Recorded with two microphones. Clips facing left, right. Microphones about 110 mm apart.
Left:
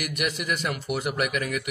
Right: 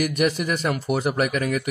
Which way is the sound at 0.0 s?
35° right (ahead or behind).